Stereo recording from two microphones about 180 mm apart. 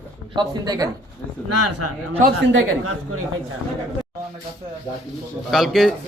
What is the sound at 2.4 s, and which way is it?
Speech, 90° right.